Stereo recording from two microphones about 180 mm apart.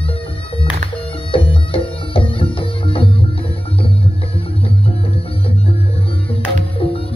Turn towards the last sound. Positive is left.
turn(degrees=30)  # may be behind; listen again after turning